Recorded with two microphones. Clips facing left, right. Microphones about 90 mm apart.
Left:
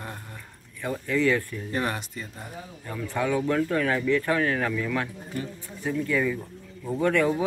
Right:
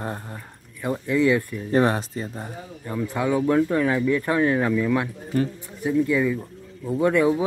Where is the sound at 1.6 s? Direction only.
35° right (ahead or behind).